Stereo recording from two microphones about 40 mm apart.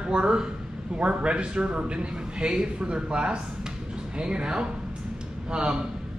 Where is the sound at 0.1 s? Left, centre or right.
Right.